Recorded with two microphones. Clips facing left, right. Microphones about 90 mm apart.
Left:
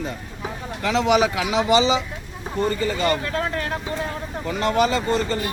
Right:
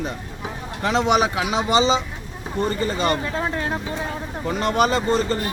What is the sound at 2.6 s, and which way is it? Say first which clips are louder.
Speech: even; 25° right (ahead or behind).